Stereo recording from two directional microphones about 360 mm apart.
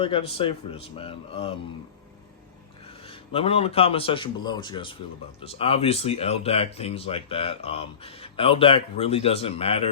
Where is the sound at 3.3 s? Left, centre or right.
Centre.